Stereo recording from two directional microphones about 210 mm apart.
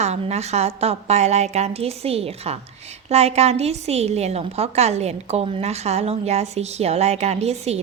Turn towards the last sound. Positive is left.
turn(degrees=-30)  # may be behind; listen again after turning